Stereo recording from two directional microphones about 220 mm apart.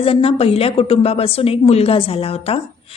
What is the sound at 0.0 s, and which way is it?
A woman's voice, 25° left (ahead or behind).